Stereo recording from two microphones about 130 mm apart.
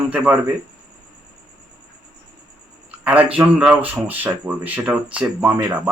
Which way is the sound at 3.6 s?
5° right (ahead or behind).